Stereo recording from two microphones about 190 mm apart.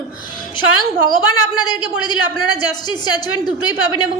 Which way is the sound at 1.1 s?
20° left (ahead or behind).